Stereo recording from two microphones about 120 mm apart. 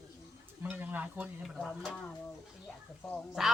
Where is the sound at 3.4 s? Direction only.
5° right (ahead or behind).